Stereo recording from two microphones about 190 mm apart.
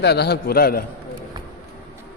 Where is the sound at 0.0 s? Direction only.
60° left (ahead or behind).